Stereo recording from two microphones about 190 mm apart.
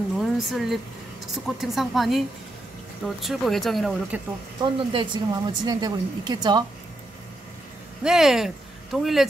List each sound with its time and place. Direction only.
0.2 s speech: centre (ahead or behind)
4.6 s speech: 25° right (ahead or behind)
8.0 s speech: centre (ahead or behind)